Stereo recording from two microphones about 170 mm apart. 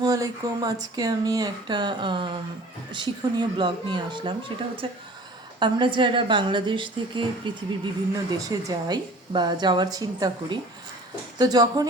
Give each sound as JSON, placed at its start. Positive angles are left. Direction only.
{"t": 0.0, "sound": "speech", "side_deg": -20}